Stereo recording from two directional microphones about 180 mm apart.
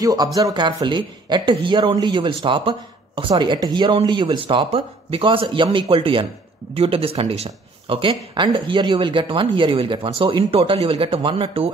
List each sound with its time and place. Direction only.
0.0 s speech: 20° right (ahead or behind)